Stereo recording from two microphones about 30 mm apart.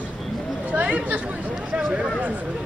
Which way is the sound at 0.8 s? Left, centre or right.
Right.